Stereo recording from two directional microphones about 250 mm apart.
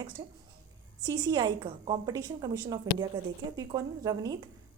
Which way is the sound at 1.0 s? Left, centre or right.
Centre.